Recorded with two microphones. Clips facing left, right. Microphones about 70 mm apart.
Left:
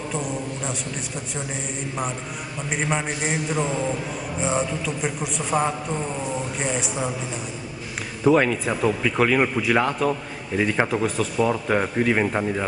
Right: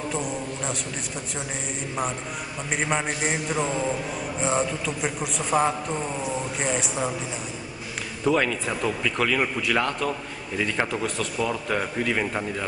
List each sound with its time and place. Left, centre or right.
0.1 s a sound: centre
2.7 s a man's voice: centre
8.2 s speech: centre